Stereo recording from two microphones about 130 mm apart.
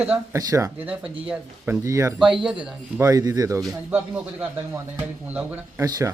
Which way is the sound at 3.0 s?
30° right (ahead or behind).